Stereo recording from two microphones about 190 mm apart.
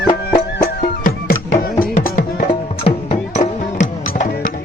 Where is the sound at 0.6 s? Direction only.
50° left (ahead or behind).